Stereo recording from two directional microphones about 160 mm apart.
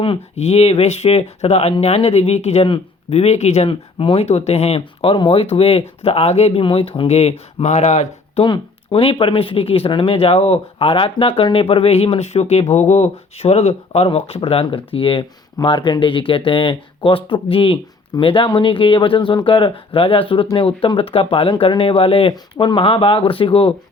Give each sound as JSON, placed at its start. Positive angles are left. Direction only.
{"t": 0.0, "sound": "speech", "side_deg": 35}
{"t": 8.4, "sound": "speech", "side_deg": 35}